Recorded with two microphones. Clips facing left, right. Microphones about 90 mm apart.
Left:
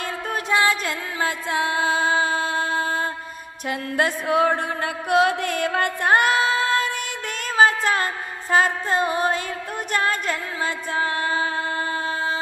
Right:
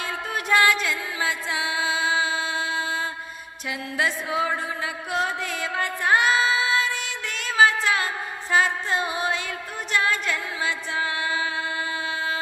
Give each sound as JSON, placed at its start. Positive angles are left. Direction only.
{"t": 0.4, "sound": "music", "side_deg": 25}
{"t": 0.7, "sound": "music", "side_deg": 45}